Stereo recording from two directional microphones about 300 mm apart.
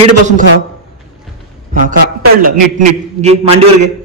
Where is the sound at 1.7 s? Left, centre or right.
Right.